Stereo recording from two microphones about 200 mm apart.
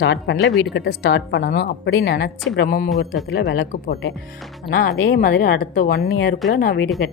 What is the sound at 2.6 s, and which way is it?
Speech, 40° left (ahead or behind).